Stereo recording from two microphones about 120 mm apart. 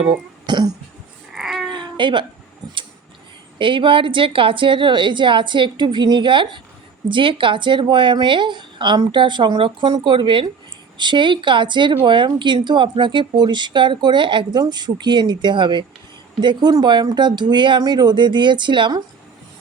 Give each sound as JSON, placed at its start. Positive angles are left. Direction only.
{"t": 0.4, "sound": "cough", "side_deg": -40}
{"t": 1.3, "sound": "a sound", "side_deg": -5}
{"t": 1.7, "sound": "babbling", "side_deg": -40}
{"t": 3.6, "sound": "a woman's voice", "side_deg": -45}